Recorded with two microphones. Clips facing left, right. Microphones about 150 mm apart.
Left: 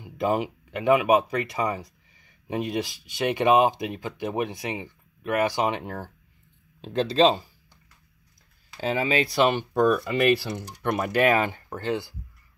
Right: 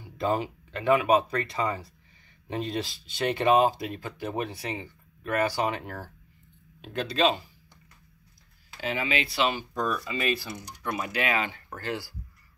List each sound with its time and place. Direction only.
0.0 s speech: 15° left (ahead or behind); by 7.4 s 30° left (ahead or behind)
8.8 s speech: 35° left (ahead or behind)
11.7 s speech: 25° left (ahead or behind)